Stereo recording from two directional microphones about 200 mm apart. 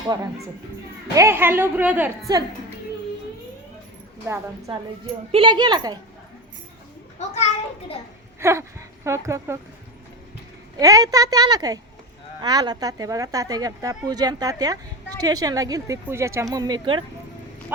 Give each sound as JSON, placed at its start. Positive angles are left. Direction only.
{"t": 1.1, "sound": "speech", "side_deg": -15}
{"t": 4.3, "sound": "speech", "side_deg": -15}
{"t": 7.2, "sound": "children playing", "side_deg": 35}
{"t": 8.4, "sound": "speech", "side_deg": -15}
{"t": 10.8, "sound": "speech", "side_deg": -15}